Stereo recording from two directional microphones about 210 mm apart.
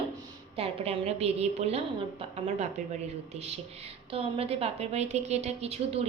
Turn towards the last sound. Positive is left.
turn(degrees=-30)  # may be behind; listen again after turning